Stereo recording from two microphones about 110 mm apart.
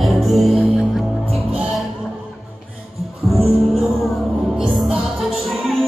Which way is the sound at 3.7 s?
Centre (ahead or behind).